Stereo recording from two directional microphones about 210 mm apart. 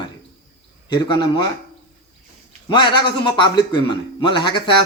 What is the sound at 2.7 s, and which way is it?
A man's voice, 25° left (ahead or behind).